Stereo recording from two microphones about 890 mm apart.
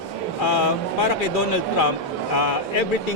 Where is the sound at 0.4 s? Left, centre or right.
Left.